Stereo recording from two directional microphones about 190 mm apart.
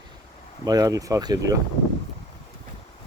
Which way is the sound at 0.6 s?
20° right (ahead or behind).